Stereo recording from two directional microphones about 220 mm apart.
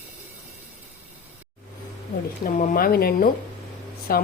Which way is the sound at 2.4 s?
40° left (ahead or behind).